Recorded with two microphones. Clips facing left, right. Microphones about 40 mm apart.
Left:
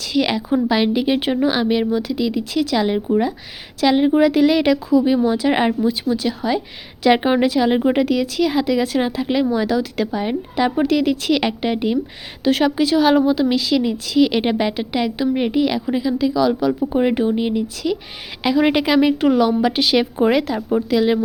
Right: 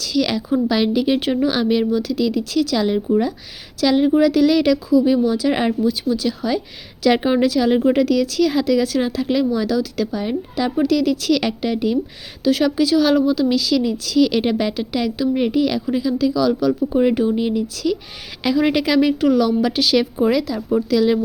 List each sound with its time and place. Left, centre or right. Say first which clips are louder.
0.0 s a woman's voice: left 1 dB; left
20.6 s a woman's voice: even; left